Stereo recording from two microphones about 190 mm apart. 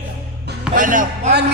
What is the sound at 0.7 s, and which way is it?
Speech, 45° right (ahead or behind).